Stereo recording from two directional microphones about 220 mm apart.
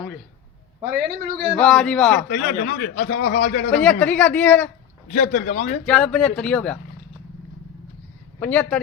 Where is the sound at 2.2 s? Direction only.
40° left (ahead or behind).